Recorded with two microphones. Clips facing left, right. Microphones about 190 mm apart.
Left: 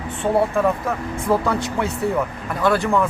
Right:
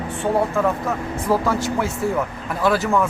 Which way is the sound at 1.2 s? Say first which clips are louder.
Even; centre (ahead or behind).